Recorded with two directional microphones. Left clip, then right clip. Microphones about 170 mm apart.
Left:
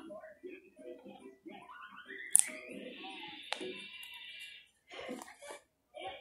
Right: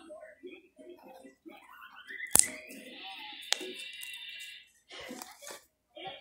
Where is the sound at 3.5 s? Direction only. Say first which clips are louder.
Right 7 dB; 40° right (ahead or behind).